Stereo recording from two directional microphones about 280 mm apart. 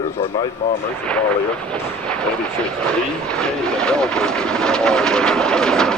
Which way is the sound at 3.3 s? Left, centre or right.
Centre.